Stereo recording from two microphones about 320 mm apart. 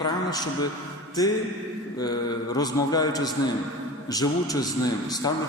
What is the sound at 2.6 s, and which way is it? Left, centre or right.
A man's voice, centre.